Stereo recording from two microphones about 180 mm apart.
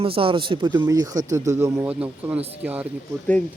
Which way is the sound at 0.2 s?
30° right (ahead or behind).